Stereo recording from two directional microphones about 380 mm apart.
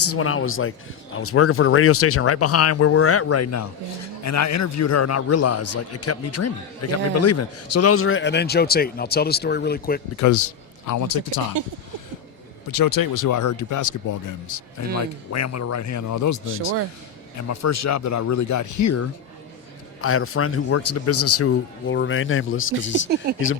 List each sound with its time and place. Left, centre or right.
0.0 s speech: left
10.2 s speech: left
12.6 s speech: left
20.0 s speech: left